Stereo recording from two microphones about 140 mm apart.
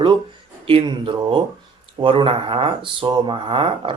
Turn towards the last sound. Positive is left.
turn(degrees=-40)  # may be behind; listen again after turning